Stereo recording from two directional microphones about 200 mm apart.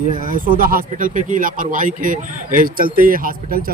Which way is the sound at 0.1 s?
45° right (ahead or behind).